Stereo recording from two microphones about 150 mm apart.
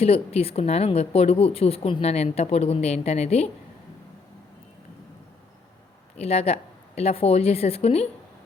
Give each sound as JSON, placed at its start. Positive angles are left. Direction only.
{"t": 0.0, "sound": "a woman's voice", "side_deg": 45}
{"t": 6.1, "sound": "a woman's voice", "side_deg": 45}